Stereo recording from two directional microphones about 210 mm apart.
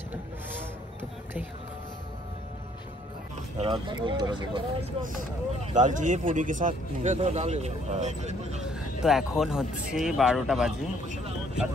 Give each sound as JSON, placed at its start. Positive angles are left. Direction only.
{"t": 3.5, "sound": "speech", "side_deg": -25}
{"t": 5.0, "sound": "speech", "side_deg": -40}
{"t": 8.6, "sound": "speech", "side_deg": -5}